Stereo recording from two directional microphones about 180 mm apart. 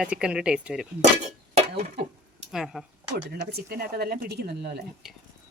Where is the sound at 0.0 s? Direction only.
5° right (ahead or behind).